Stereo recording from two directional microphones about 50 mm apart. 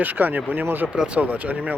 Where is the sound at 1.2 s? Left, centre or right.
Right.